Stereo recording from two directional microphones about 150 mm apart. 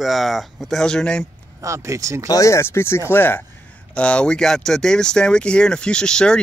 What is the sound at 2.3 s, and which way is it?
Speech, 20° left (ahead or behind).